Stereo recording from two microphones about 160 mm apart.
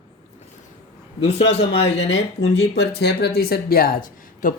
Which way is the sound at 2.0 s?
90° left.